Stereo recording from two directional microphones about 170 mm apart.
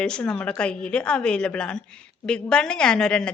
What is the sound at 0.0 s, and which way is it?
A woman's voice, 5° left (ahead or behind).